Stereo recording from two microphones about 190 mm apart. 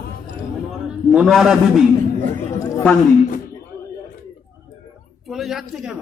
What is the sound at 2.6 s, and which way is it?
Chatter, 15° left (ahead or behind).